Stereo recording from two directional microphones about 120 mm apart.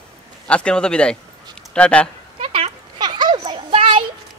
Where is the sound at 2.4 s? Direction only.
55° right (ahead or behind).